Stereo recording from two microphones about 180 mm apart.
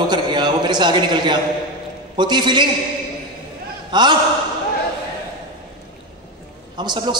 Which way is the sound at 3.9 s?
25° right (ahead or behind).